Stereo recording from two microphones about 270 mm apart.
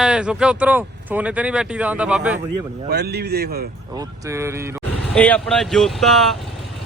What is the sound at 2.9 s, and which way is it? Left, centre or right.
Speech, right.